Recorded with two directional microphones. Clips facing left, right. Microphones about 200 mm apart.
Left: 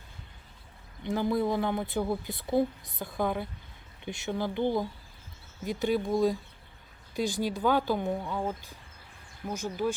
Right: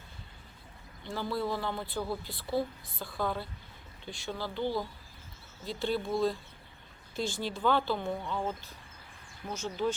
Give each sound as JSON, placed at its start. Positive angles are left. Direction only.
{"t": 1.0, "sound": "speech", "side_deg": 20}
{"t": 7.4, "sound": "speech", "side_deg": 10}